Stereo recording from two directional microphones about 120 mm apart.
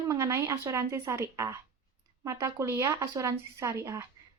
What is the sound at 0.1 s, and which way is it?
A woman's voice, 25° right (ahead or behind).